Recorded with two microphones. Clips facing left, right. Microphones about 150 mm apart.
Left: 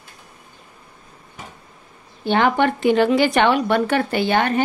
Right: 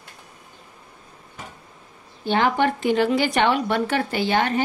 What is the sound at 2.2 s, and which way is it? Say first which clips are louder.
A woman's voice: left 3 dB; 65° left (ahead or behind).